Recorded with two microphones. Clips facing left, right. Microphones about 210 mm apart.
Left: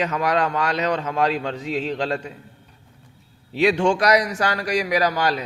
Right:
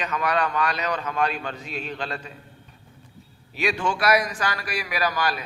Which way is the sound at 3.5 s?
85° left.